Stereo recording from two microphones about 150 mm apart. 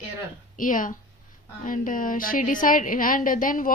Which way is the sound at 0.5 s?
65° left (ahead or behind).